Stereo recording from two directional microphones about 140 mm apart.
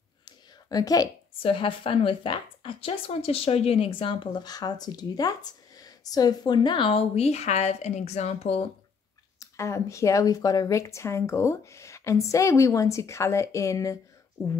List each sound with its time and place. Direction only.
0.2 s a sound: 30° left (ahead or behind)
1.4 s a woman's voice: 40° left (ahead or behind)
9.4 s speech: 20° left (ahead or behind)